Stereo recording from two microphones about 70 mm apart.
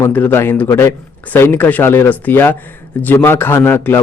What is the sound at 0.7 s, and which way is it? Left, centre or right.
A man's voice, left.